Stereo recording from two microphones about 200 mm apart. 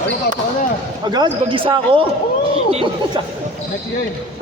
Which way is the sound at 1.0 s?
20° right (ahead or behind).